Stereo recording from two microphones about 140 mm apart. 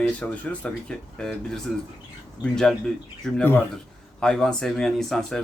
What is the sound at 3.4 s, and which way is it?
A man's voice, 15° left (ahead or behind).